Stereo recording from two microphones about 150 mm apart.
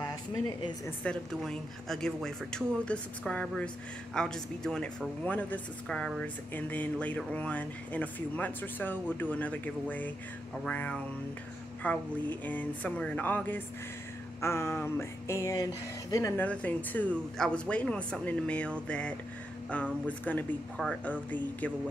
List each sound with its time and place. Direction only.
1.3 s speech: centre (ahead or behind); by 16.4 s 20° left (ahead or behind)
16.4 s speech: 10° left (ahead or behind)